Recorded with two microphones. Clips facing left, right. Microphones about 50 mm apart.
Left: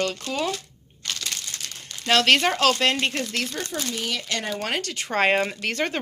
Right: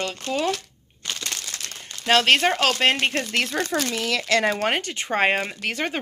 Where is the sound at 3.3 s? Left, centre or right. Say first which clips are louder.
Right 4 dB; right.